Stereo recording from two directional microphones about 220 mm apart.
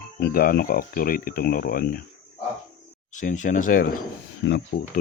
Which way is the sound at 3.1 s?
35° left (ahead or behind).